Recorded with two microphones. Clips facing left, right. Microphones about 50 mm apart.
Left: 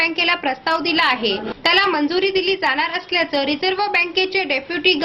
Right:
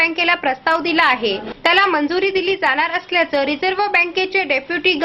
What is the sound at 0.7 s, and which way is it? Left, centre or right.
Speech, right.